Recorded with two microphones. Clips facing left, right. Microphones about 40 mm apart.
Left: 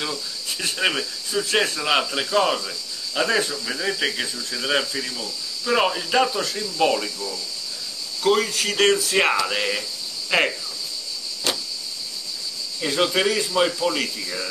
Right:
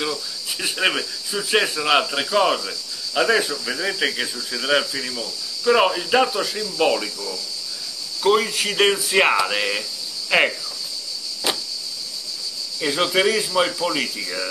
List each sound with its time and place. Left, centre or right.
0.0 s speech: centre
8.2 s speech: centre
11.5 s a sound: centre
12.8 s speech: centre